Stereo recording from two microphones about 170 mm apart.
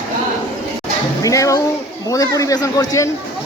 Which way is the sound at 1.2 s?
20° left (ahead or behind).